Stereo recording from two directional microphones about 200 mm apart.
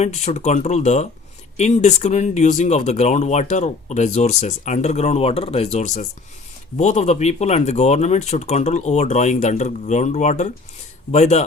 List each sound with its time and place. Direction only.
0.0 s speech: 35° left (ahead or behind)